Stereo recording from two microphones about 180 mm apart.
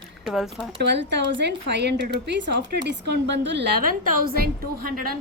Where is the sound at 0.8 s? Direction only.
75° right (ahead or behind); by 5.1 s 55° right (ahead or behind).